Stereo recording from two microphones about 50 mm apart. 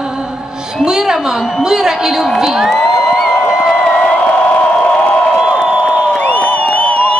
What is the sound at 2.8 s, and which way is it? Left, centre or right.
Music, centre.